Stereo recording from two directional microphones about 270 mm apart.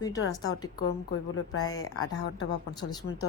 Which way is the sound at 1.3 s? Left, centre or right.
Left.